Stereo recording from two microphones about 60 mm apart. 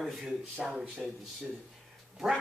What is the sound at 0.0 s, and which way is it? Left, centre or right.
A man's voice, centre.